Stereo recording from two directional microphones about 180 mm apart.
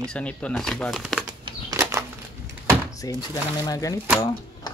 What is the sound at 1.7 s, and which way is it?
Bird flight, 15° right (ahead or behind).